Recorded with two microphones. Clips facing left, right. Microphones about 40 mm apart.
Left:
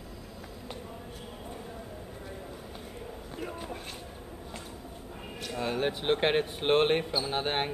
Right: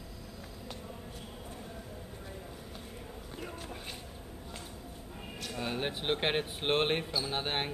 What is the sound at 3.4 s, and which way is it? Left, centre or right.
Speech, centre.